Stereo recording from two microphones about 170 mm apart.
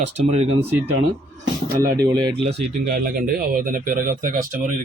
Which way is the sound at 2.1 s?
30° right (ahead or behind).